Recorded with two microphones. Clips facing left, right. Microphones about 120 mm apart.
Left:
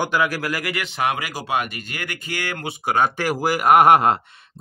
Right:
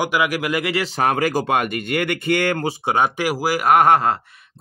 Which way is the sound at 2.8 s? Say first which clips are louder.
Left 1 dB; 25° right (ahead or behind).